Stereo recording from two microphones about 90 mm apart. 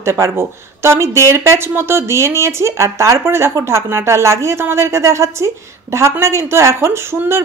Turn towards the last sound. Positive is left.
turn(degrees=-30)  # may be behind; listen again after turning